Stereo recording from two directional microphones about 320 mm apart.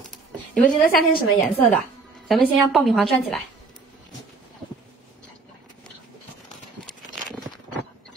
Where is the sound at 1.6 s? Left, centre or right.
Centre.